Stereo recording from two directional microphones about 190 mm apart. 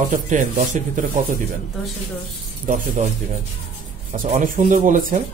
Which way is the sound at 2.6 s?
40° right (ahead or behind).